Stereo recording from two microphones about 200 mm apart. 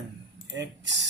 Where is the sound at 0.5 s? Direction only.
65° right (ahead or behind).